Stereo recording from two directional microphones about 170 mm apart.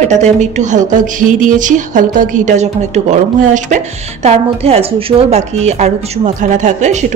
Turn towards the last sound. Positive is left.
turn(degrees=-45)  # may be behind; listen again after turning